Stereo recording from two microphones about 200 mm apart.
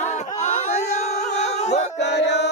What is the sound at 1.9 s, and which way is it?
Chant, 60° left (ahead or behind).